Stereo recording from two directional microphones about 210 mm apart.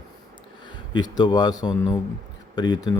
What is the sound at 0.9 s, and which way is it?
Speech, 20° left (ahead or behind).